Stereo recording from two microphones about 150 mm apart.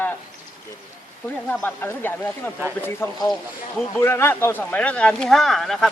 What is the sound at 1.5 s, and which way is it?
A man's voice, 15° left (ahead or behind).